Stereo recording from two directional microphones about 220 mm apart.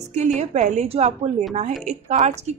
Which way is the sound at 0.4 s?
30° right (ahead or behind).